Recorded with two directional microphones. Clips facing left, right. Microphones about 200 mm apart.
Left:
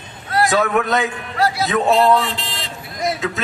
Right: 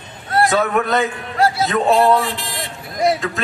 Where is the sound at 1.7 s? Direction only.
Centre (ahead or behind).